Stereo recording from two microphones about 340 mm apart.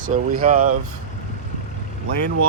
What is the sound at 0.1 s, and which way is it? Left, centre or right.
Speech, right.